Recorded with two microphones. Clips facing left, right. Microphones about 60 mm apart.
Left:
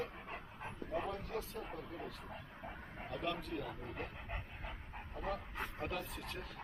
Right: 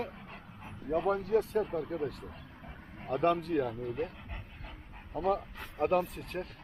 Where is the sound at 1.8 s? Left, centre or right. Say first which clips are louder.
Right 12 dB; right.